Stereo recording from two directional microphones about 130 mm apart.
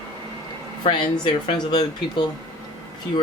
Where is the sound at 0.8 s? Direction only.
35° left (ahead or behind).